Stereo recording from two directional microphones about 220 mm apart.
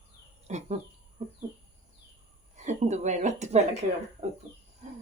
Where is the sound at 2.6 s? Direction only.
30° right (ahead or behind).